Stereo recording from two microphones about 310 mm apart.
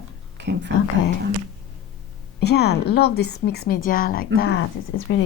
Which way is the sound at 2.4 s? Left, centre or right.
Left.